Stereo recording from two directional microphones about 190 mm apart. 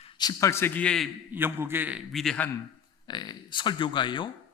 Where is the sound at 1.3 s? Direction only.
10° right (ahead or behind).